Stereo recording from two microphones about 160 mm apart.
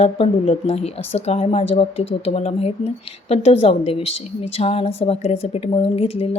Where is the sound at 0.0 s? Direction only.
40° left (ahead or behind).